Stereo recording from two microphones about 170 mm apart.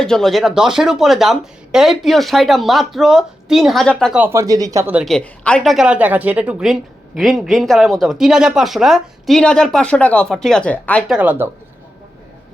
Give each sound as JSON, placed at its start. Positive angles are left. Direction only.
{"t": 0.0, "sound": "speech", "side_deg": 5}
{"t": 4.2, "sound": "speech", "side_deg": -15}
{"t": 4.9, "sound": "speech", "side_deg": 0}
{"t": 11.1, "sound": "speech", "side_deg": -10}